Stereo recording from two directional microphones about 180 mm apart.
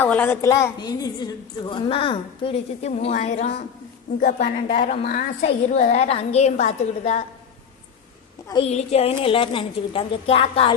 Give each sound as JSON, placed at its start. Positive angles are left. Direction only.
{"t": 0.0, "sound": "a woman's voice", "side_deg": 10}
{"t": 8.6, "sound": "a woman's voice", "side_deg": 35}